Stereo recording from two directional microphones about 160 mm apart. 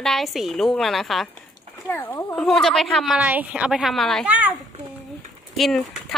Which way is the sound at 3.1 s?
10° right (ahead or behind).